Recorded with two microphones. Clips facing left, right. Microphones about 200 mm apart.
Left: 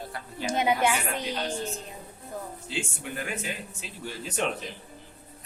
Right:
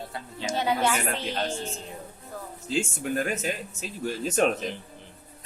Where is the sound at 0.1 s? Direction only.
25° right (ahead or behind).